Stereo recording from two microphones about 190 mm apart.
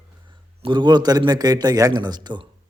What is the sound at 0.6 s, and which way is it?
A man's voice, 25° right (ahead or behind).